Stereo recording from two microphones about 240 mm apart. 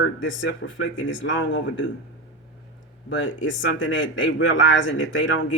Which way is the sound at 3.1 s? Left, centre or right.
Left.